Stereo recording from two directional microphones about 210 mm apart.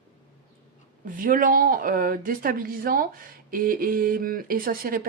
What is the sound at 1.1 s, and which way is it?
Speech, 40° right (ahead or behind).